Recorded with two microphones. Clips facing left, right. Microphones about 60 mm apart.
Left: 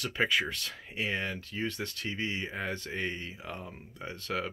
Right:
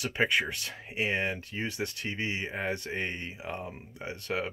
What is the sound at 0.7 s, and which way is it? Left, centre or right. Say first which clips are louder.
Speech: right 4 dB; centre.